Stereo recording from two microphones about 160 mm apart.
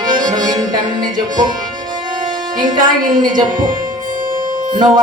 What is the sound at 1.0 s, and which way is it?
Speech, 25° right (ahead or behind).